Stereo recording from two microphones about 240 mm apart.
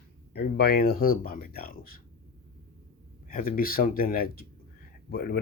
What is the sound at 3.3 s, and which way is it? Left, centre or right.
Speech, left.